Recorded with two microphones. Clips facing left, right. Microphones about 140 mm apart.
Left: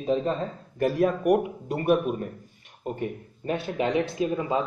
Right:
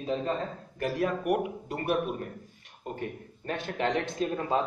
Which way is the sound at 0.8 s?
25° left (ahead or behind).